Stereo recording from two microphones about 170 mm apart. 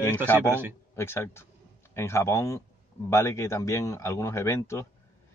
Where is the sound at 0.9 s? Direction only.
15° left (ahead or behind).